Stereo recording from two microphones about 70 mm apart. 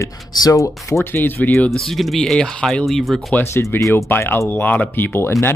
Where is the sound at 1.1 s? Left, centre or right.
Left.